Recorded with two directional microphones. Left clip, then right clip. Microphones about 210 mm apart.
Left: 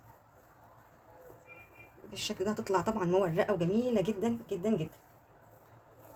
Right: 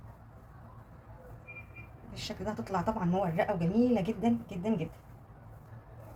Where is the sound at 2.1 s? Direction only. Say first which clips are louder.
Left 3 dB; 55° left (ahead or behind).